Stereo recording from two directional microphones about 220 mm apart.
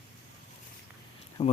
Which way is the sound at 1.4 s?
25° left (ahead or behind).